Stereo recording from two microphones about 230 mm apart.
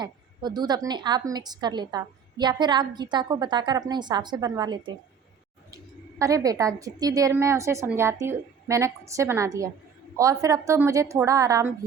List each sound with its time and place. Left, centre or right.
0.0 s a woman's voice: centre
6.1 s a woman's voice: centre